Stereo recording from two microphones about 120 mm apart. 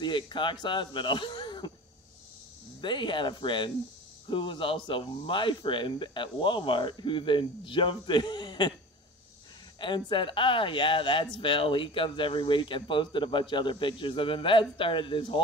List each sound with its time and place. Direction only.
0.0 s speech: 40° left (ahead or behind)
2.8 s speech: 40° left (ahead or behind)
9.8 s speech: 40° left (ahead or behind)